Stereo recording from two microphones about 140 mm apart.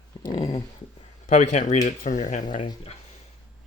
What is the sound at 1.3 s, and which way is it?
Speech, 60° left (ahead or behind).